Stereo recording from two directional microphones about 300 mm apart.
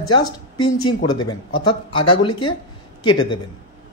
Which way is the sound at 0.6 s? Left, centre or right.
Centre.